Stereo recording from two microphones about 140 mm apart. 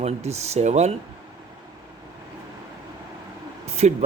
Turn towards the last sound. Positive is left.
turn(degrees=-50)  # may be behind; listen again after turning